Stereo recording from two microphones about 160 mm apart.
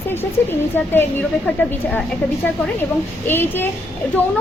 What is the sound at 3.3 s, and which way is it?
Speech, 15° left (ahead or behind).